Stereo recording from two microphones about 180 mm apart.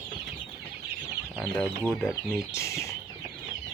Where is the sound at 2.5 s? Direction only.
15° left (ahead or behind).